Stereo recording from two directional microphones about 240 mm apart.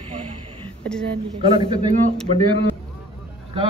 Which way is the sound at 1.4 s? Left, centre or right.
Right.